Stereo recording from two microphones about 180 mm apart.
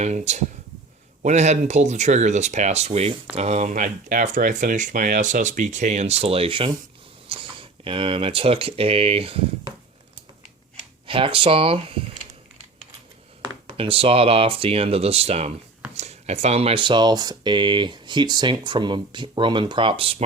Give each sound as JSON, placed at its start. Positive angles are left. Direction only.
{"t": 0.0, "sound": "speech", "side_deg": -40}
{"t": 11.0, "sound": "a sound", "side_deg": -30}
{"t": 13.7, "sound": "speech", "side_deg": -30}